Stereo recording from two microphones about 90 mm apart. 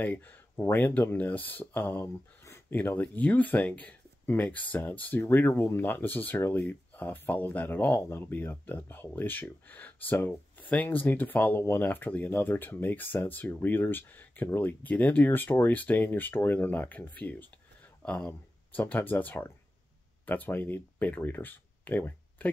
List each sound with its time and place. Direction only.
0.0 s speech: 20° left (ahead or behind)